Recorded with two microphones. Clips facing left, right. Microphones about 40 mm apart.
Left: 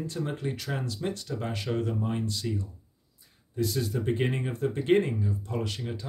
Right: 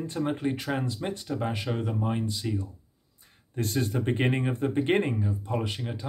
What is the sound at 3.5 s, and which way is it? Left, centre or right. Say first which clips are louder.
Speech: right 1 dB; right.